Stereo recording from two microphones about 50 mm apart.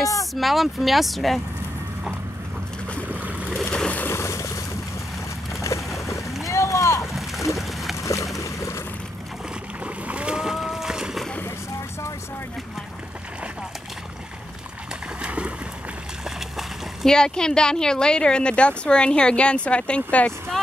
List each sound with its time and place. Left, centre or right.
0.0 s speech: centre
3.1 s boat: right
3.6 s a sound: centre
4.1 s boat: left
7.5 s a sound: centre
8.0 s boat: left
9.8 s boat: right
15.2 s boat: right
16.3 s a sound: centre
17.0 s speech: centre